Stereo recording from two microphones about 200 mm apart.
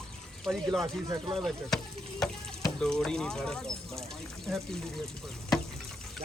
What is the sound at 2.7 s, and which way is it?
Speech, 5° left (ahead or behind).